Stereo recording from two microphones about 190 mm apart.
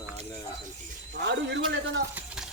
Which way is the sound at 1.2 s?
65° right (ahead or behind).